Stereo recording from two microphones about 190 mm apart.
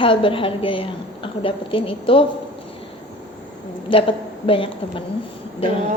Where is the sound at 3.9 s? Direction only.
30° left (ahead or behind).